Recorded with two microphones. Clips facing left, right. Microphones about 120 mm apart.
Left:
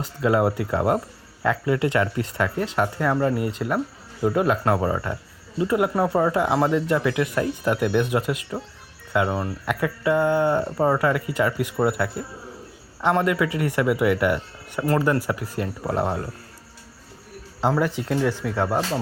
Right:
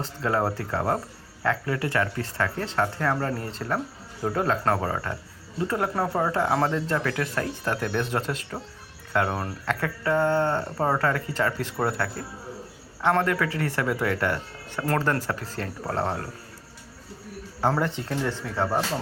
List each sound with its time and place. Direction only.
0.0 s speech: 15° left (ahead or behind)
17.7 s speech: 10° left (ahead or behind)